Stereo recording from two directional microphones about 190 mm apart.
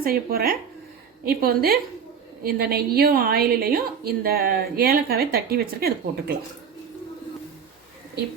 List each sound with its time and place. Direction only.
0.0 s a woman's voice: 50° right (ahead or behind)